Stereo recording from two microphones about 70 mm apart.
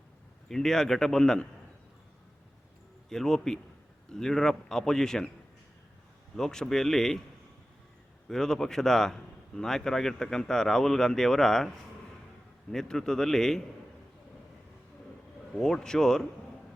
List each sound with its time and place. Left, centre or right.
0.4 s speech: centre
3.1 s speech: centre
6.3 s speech: centre
8.3 s speech: centre
12.7 s speech: centre
15.6 s speech: centre